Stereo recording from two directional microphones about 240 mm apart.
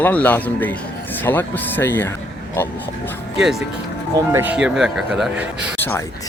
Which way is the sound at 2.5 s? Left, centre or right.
Centre.